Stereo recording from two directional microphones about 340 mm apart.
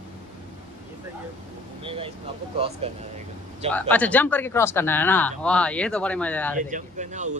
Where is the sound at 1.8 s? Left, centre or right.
Centre.